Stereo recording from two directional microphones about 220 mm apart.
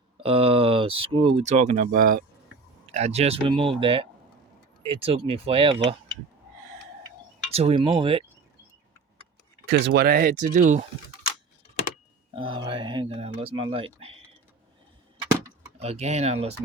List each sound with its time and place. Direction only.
0.2 s speech: 25° right (ahead or behind)
7.5 s speech: 25° right (ahead or behind)
9.6 s speech: 50° right (ahead or behind); by 10.8 s 35° right (ahead or behind)
12.3 s speech: 20° right (ahead or behind)
15.8 s speech: 30° right (ahead or behind)